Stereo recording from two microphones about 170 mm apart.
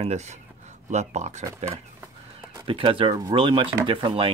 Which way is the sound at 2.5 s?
30° right (ahead or behind).